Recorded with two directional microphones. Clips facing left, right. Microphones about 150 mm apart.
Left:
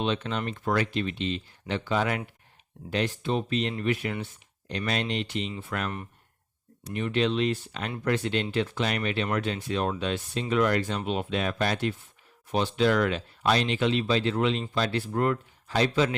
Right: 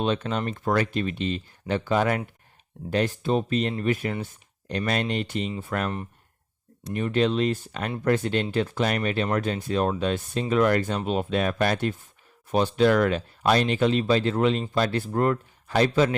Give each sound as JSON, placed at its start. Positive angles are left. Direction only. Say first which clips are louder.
{"t": 0.0, "sound": "speech", "louder": "right 3 dB", "side_deg": -45}